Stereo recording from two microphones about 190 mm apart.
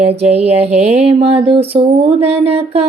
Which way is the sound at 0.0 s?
35° right (ahead or behind).